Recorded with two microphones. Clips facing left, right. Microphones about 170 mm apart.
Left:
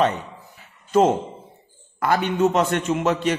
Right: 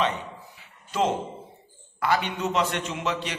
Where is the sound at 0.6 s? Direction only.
45° left (ahead or behind).